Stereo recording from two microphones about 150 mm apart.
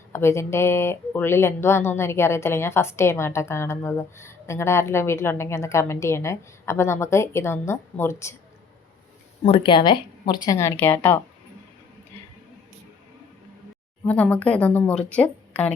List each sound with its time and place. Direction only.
0.1 s speech: 15° left (ahead or behind)
9.4 s speech: 35° left (ahead or behind); by 11.2 s 15° left (ahead or behind)
14.0 s speech: 10° left (ahead or behind)